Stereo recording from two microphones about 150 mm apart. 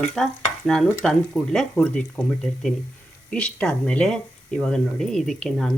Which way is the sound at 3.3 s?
5° left (ahead or behind).